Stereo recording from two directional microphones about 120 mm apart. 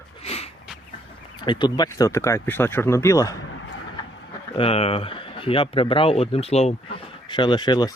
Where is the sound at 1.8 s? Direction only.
25° left (ahead or behind).